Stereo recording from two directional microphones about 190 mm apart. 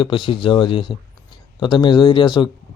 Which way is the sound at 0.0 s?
25° left (ahead or behind).